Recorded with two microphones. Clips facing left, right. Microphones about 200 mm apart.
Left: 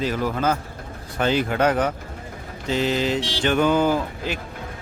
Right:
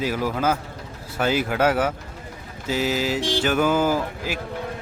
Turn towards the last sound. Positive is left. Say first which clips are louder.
# left 1 dB
turn(degrees=-5)  # may be behind; listen again after turning